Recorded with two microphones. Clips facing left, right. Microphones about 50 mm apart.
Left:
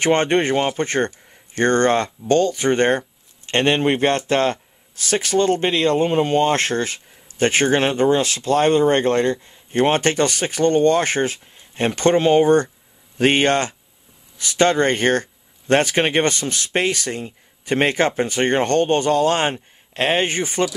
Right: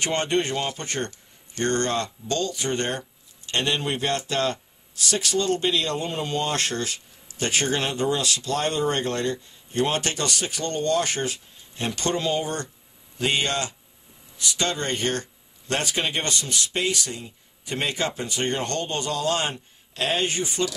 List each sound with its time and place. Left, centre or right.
0.0 s speech: left